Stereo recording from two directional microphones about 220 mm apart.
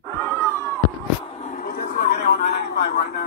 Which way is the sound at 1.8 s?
45° left (ahead or behind).